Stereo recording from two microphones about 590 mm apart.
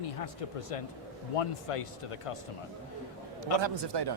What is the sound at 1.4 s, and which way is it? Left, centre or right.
Speech, left.